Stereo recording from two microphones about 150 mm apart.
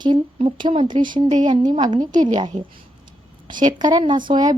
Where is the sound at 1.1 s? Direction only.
55° right (ahead or behind).